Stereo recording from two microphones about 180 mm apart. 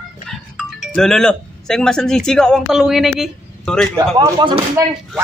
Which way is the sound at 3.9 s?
20° right (ahead or behind).